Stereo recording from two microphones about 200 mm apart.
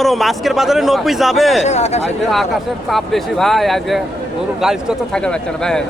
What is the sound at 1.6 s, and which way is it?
Speech, 35° left (ahead or behind).